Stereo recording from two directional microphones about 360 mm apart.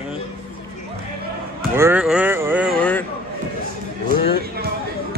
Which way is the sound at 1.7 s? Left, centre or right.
Centre.